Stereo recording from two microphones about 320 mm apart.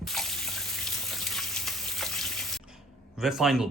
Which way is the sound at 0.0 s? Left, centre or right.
Centre.